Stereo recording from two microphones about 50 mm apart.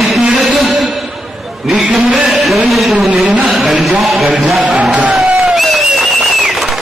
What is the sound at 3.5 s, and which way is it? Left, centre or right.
Speech, centre.